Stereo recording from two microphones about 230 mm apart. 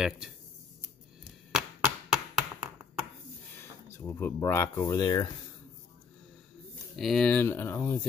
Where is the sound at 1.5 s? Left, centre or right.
Centre.